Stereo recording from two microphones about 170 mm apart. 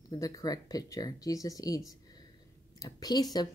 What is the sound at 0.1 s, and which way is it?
Speech, 20° left (ahead or behind).